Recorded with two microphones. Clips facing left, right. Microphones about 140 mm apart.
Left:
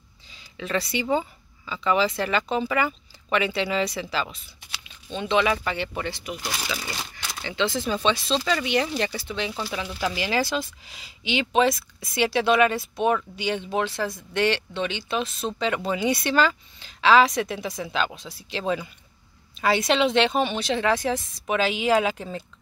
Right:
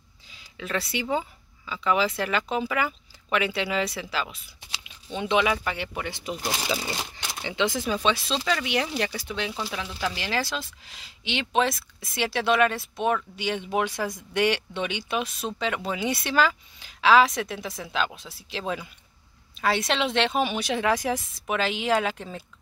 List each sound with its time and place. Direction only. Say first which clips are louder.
0.3 s speech: left 3 dB; 5° right (ahead or behind)
6.3 s speech: right 3 dB; 20° right (ahead or behind)
21.5 s speech: left 3 dB; centre (ahead or behind)